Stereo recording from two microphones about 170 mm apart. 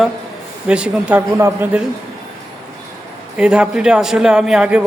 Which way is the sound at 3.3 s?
5° right (ahead or behind).